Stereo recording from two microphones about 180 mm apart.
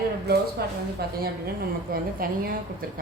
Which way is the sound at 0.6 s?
60° right (ahead or behind).